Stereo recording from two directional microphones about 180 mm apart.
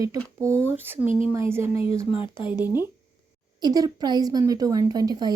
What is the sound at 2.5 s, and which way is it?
Speech, 10° right (ahead or behind).